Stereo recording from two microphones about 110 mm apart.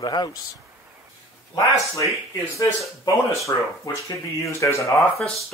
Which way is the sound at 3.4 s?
30° left (ahead or behind).